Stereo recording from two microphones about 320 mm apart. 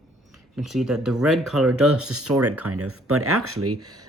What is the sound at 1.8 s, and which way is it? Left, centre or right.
Speech, right.